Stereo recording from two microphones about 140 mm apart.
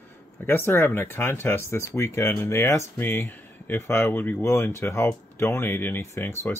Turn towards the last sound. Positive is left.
turn(degrees=15)  # may be behind; listen again after turning